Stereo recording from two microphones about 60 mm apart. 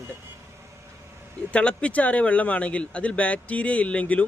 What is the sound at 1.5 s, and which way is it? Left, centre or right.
Speech, centre.